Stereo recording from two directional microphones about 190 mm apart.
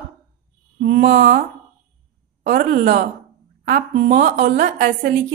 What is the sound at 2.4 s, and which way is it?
A woman's voice, 45° right (ahead or behind).